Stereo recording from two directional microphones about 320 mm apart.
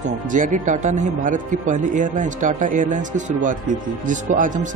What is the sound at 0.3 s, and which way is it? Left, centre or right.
Speech, right.